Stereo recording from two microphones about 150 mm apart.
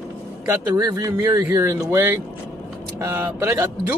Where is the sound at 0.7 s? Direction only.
25° right (ahead or behind).